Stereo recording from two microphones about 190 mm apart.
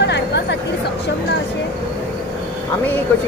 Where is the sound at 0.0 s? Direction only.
65° left (ahead or behind).